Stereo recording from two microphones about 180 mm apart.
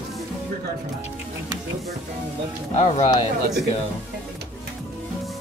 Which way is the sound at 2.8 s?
40° left (ahead or behind).